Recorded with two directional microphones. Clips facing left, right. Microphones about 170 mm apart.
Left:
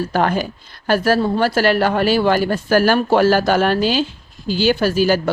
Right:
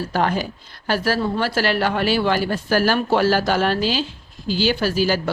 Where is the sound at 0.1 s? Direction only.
55° left (ahead or behind).